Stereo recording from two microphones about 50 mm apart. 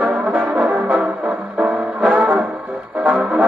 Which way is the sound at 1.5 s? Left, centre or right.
Right.